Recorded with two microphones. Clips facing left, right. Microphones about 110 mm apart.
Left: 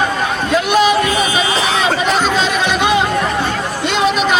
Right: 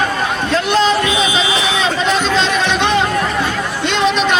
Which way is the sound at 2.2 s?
10° left (ahead or behind).